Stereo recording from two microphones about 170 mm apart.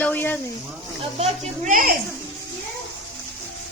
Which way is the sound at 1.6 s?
55° right (ahead or behind).